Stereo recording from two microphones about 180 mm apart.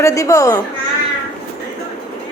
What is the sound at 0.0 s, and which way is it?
Speech, 15° left (ahead or behind).